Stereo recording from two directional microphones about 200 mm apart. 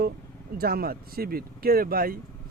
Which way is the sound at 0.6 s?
50° right (ahead or behind).